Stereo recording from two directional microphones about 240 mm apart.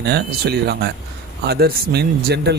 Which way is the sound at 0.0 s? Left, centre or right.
Right.